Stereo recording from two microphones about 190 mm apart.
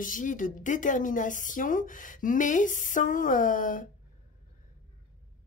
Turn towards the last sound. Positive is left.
turn(degrees=45)  # may be behind; listen again after turning